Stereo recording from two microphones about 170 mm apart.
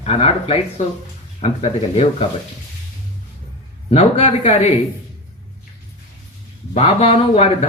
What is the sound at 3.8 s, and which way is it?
Speech, 40° left (ahead or behind).